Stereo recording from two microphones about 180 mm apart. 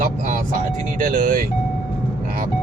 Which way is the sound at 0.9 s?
50° right (ahead or behind).